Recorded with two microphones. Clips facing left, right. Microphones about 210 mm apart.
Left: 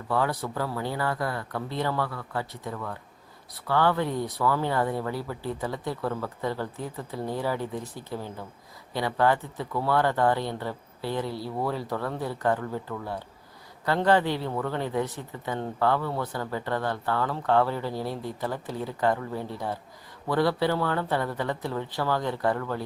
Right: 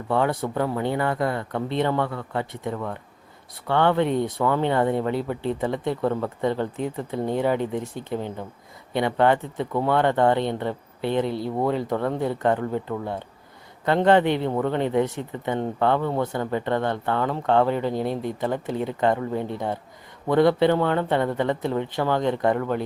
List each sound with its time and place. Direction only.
0.1 s speech: 25° right (ahead or behind)
13.8 s speech: 20° right (ahead or behind)